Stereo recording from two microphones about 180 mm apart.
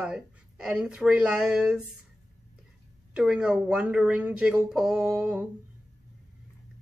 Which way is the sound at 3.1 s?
5° right (ahead or behind).